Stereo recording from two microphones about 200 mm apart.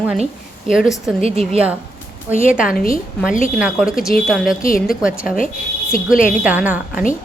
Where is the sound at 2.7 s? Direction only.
45° left (ahead or behind).